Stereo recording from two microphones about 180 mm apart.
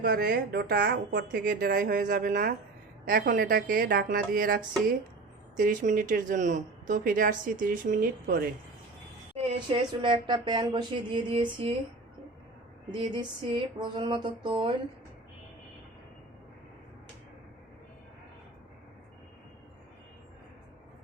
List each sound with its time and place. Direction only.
0.0 s speech: 60° right (ahead or behind)
9.4 s a sound: 35° right (ahead or behind)
10.0 s speech: 25° right (ahead or behind)
12.9 s speech: 25° right (ahead or behind)